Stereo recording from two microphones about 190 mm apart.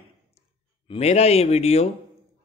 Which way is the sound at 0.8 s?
35° left (ahead or behind).